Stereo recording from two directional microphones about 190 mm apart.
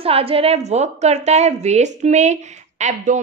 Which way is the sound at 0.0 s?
30° right (ahead or behind).